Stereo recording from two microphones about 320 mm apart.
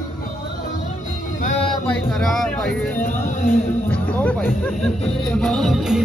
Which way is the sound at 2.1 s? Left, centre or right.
Centre.